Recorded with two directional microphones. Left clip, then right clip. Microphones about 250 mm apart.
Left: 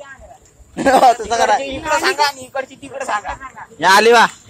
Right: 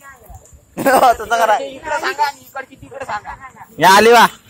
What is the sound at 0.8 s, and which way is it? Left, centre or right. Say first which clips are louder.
Speech: even; centre.